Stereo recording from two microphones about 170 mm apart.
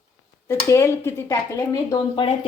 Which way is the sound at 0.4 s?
15° left (ahead or behind).